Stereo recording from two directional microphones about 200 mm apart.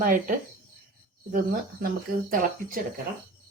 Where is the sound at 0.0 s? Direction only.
45° right (ahead or behind).